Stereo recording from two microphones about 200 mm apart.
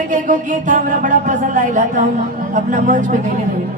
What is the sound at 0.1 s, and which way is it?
Speech, 40° right (ahead or behind).